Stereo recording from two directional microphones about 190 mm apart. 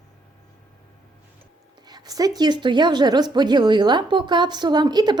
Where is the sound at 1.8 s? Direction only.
20° right (ahead or behind).